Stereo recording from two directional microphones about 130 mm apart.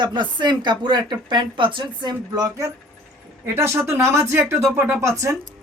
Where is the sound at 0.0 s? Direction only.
35° right (ahead or behind).